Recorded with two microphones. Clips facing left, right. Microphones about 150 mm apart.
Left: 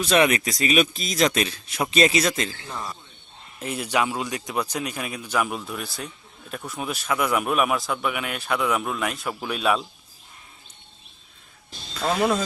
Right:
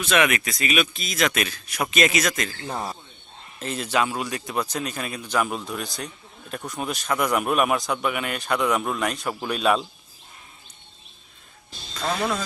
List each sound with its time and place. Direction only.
0.0 s a man's voice: 35° left (ahead or behind)
3.6 s a man's voice: 15° left (ahead or behind)
11.9 s speech: 10° left (ahead or behind)